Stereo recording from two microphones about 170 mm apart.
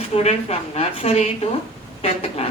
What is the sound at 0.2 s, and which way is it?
Speech, 40° left (ahead or behind).